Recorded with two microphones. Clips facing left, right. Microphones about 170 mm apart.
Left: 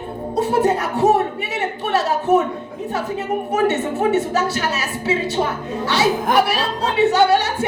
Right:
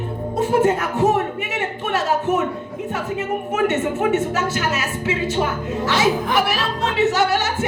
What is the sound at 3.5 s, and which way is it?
Speech, 35° left (ahead or behind).